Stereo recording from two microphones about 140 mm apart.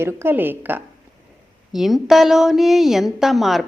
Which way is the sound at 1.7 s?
Centre (ahead or behind).